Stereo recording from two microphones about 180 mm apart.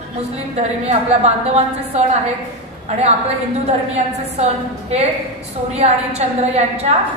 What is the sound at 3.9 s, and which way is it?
A woman's voice, 40° right (ahead or behind).